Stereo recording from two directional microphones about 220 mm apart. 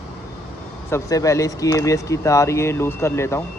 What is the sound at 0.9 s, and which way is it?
Speech, 15° left (ahead or behind).